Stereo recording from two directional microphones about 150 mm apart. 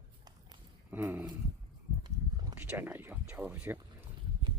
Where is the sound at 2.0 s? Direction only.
25° right (ahead or behind).